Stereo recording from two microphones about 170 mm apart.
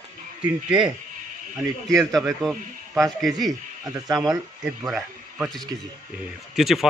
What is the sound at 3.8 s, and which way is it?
Speech, 20° right (ahead or behind).